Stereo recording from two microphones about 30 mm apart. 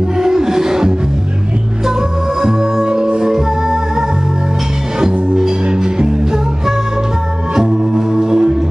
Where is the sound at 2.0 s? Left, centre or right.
Centre.